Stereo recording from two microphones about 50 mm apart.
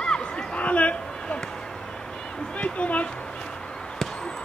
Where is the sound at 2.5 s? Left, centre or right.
Left.